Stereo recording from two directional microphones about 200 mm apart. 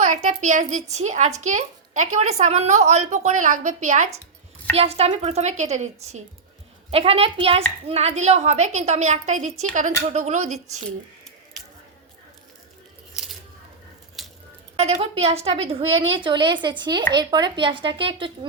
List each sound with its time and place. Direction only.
0.0 s a child's voice: 40° right (ahead or behind)
14.2 s a sound: centre (ahead or behind)
14.8 s a woman's voice: 30° right (ahead or behind)